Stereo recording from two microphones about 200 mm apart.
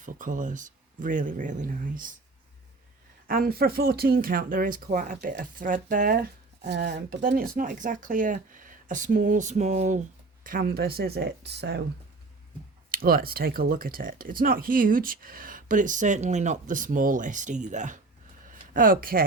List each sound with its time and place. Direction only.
0.0 s speech: 40° right (ahead or behind)
3.2 s speech: 50° right (ahead or behind)
10.4 s speech: 45° right (ahead or behind)
12.9 s speech: 45° right (ahead or behind)